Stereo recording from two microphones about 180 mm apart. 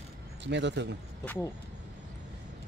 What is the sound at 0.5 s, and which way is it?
Speech, 75° right (ahead or behind).